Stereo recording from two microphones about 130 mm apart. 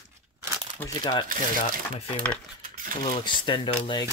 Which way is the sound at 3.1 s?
40° left (ahead or behind).